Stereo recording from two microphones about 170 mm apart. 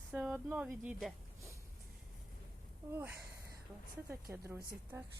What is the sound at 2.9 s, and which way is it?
Speech, 10° right (ahead or behind).